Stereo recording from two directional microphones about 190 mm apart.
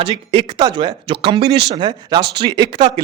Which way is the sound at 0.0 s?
25° right (ahead or behind).